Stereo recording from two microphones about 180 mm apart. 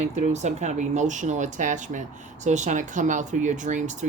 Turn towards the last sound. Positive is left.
turn(degrees=-40)  # may be behind; listen again after turning